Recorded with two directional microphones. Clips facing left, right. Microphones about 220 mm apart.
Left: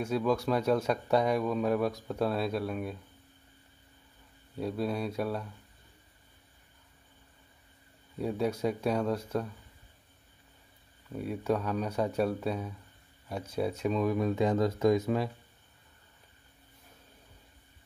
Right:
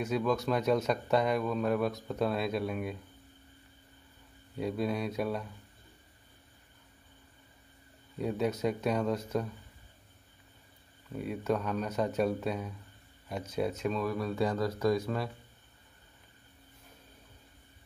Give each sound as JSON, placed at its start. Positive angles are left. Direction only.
{"t": 0.0, "sound": "speech", "side_deg": 10}
{"t": 4.6, "sound": "speech", "side_deg": 0}
{"t": 8.2, "sound": "speech", "side_deg": 10}
{"t": 11.1, "sound": "speech", "side_deg": 5}